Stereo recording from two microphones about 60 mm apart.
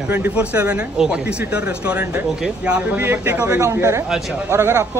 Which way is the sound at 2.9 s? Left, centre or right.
Right.